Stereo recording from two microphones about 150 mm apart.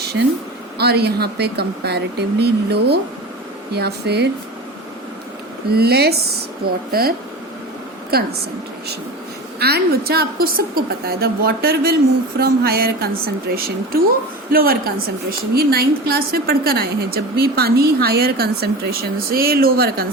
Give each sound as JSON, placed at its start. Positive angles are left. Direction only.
{"t": 0.8, "sound": "a woman's voice", "side_deg": -90}
{"t": 5.7, "sound": "a woman's voice", "side_deg": -90}
{"t": 8.1, "sound": "a woman's voice", "side_deg": -90}
{"t": 9.6, "sound": "a woman's voice", "side_deg": -90}